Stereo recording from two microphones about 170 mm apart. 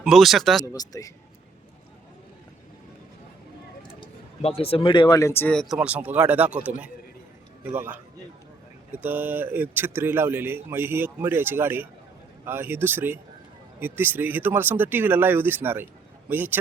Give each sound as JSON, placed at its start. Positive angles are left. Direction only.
{"t": 0.0, "sound": "speech", "side_deg": 0}
{"t": 0.6, "sound": "speech", "side_deg": 20}
{"t": 4.4, "sound": "speech", "side_deg": 35}